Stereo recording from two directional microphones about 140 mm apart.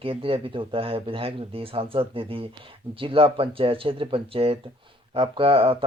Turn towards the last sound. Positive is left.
turn(degrees=-40)  # may be behind; listen again after turning